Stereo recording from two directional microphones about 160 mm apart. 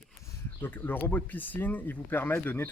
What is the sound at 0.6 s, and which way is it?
Speech, 10° left (ahead or behind).